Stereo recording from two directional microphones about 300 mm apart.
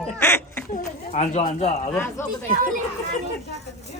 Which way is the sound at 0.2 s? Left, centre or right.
Centre.